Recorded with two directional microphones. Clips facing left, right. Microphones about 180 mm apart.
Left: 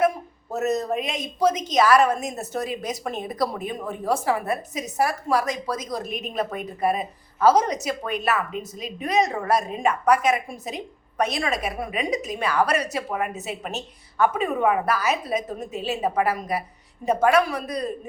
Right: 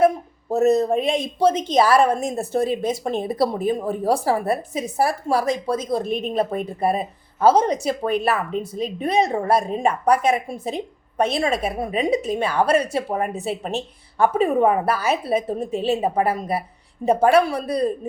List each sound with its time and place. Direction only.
0.5 s a woman's voice: 30° right (ahead or behind)